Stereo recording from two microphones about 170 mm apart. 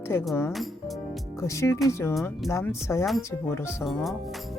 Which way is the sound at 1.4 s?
15° left (ahead or behind).